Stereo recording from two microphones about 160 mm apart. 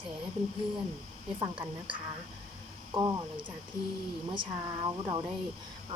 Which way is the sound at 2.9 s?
30° right (ahead or behind).